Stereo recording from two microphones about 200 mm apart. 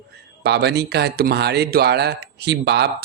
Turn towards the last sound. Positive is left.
turn(degrees=-55)  # may be behind; listen again after turning